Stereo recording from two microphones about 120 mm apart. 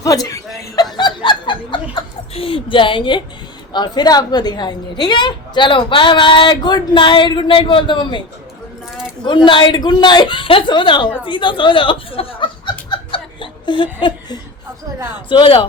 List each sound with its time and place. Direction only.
0.0 s speech: 30° left (ahead or behind)
0.9 s snicker: 40° left (ahead or behind)
3.7 s a woman's voice: 35° left (ahead or behind)
9.2 s a woman's voice: 40° left (ahead or behind)
13.1 s chuckle: 45° left (ahead or behind)
15.3 s speech: 45° left (ahead or behind)